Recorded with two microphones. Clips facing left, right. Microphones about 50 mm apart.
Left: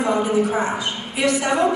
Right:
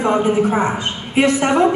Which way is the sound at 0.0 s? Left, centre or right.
Right.